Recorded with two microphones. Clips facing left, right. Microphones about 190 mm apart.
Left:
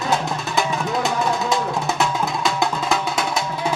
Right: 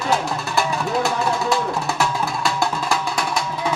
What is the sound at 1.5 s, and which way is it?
Music, 20° left (ahead or behind).